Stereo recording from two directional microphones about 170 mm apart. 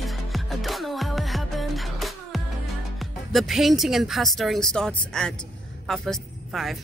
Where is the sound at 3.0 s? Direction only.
Centre (ahead or behind).